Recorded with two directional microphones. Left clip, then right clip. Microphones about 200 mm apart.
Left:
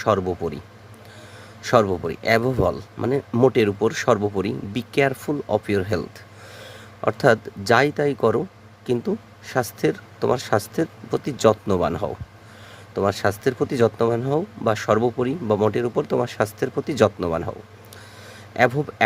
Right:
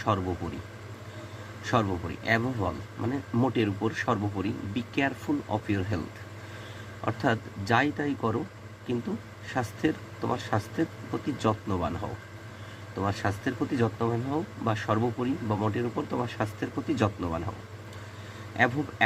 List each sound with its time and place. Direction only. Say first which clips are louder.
1.6 s speech: left 10 dB; 55° left (ahead or behind)
7.0 s speech: left 10 dB; 55° left (ahead or behind)
9.5 s speech: left 7 dB; 55° left (ahead or behind)
18.5 s a man's voice: left 7 dB; 55° left (ahead or behind)